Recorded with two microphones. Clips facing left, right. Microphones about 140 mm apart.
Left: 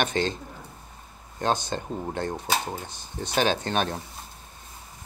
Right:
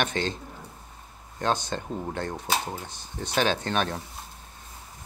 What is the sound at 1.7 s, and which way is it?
Speech, 30° left (ahead or behind).